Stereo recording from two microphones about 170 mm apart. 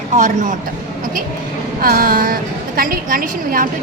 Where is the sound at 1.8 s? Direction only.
60° right (ahead or behind).